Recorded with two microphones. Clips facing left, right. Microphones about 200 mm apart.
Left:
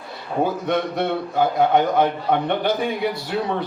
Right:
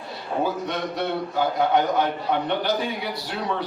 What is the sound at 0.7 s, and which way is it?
A man's voice, 50° left (ahead or behind).